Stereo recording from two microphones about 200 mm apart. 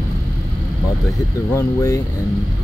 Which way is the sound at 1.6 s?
15° left (ahead or behind).